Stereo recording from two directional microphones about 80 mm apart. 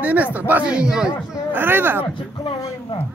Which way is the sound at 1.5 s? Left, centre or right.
Right.